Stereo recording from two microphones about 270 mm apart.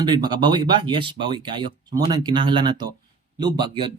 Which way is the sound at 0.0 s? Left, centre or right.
Centre.